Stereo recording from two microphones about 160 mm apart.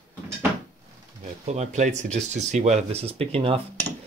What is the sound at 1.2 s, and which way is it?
Speech, 45° right (ahead or behind).